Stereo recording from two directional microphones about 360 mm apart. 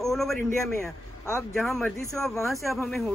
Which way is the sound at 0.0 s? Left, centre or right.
Centre.